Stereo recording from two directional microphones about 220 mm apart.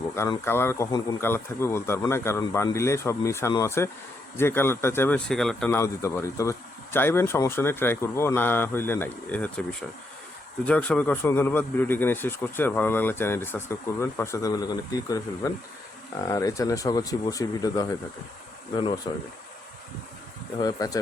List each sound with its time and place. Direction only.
0.2 s speech: 10° left (ahead or behind)
20.6 s speech: 15° left (ahead or behind)